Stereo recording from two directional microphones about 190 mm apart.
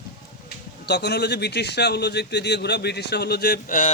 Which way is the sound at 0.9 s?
60° left (ahead or behind).